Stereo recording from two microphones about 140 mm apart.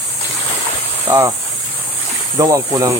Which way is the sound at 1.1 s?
25° right (ahead or behind).